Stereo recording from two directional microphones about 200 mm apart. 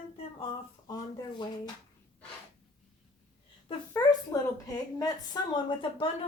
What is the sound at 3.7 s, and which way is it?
A woman's voice, 20° left (ahead or behind).